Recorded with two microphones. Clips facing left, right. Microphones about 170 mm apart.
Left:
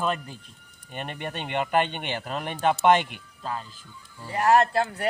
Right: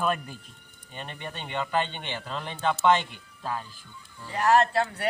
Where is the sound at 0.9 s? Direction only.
60° left (ahead or behind).